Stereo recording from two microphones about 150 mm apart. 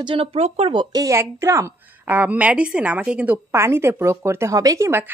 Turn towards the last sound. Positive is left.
turn(degrees=-15)  # may be behind; listen again after turning